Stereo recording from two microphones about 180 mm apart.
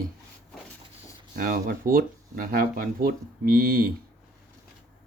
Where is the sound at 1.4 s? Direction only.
55° right (ahead or behind).